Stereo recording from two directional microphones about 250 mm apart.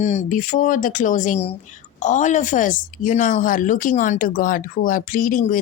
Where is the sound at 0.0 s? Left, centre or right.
Left.